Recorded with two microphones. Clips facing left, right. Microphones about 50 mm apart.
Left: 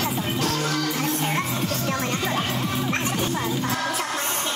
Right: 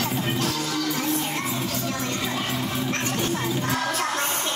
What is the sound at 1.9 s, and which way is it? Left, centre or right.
Music, left.